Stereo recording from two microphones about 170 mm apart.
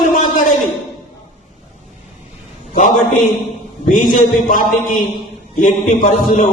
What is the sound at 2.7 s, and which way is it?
A man's voice, 50° left (ahead or behind).